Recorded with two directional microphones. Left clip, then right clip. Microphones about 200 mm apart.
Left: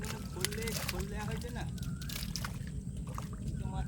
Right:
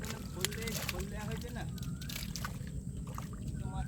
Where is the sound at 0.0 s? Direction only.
Centre (ahead or behind).